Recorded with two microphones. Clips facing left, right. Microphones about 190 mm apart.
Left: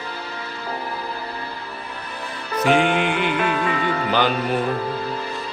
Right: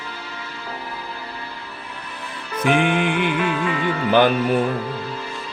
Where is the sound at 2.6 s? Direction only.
55° right (ahead or behind).